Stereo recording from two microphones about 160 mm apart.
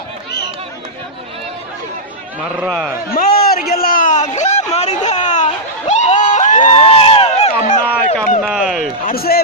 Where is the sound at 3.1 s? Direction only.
70° left (ahead or behind); by 6.7 s 50° left (ahead or behind).